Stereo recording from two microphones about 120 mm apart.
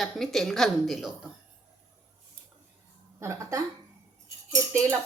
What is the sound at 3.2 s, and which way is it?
Speech, 25° right (ahead or behind).